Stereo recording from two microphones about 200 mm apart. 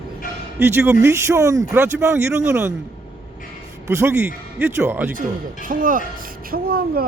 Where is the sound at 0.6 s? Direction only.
10° right (ahead or behind).